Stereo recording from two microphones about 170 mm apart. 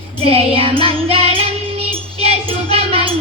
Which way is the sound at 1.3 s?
35° right (ahead or behind).